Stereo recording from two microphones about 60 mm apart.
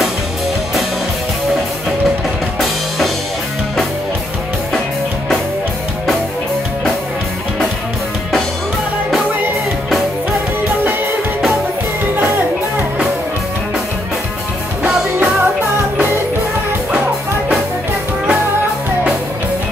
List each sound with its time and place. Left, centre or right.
12.2 s music: right
15.1 s music: right